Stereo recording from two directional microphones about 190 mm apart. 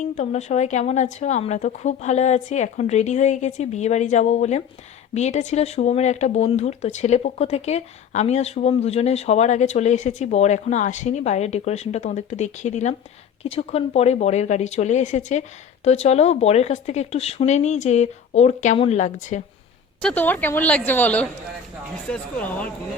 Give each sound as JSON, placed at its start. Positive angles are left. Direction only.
{"t": 0.0, "sound": "speech", "side_deg": 35}
{"t": 20.0, "sound": "a woman's voice", "side_deg": 5}